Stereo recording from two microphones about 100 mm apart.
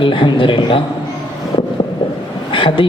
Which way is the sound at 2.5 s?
55° left (ahead or behind).